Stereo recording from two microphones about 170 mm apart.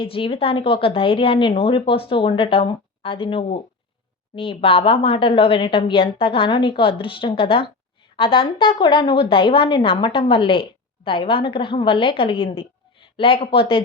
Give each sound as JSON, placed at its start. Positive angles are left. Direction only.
{"t": 0.0, "sound": "a woman's voice", "side_deg": 30}